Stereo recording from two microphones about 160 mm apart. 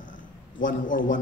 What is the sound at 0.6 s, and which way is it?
Speech, 55° left (ahead or behind).